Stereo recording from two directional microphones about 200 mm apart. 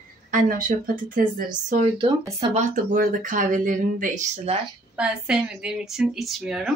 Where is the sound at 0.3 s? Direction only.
45° right (ahead or behind).